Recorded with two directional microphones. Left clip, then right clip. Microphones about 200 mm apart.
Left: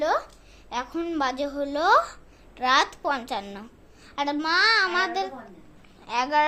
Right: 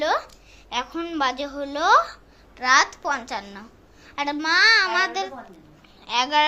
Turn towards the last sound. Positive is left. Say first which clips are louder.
# right 2 dB
turn(degrees=10)  # may be behind; listen again after turning